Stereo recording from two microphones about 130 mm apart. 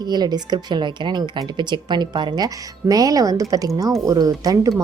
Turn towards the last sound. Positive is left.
turn(degrees=-25)  # may be behind; listen again after turning